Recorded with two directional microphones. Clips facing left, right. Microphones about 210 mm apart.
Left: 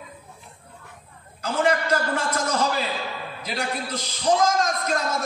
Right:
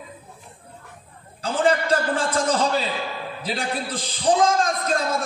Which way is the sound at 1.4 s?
30° right (ahead or behind).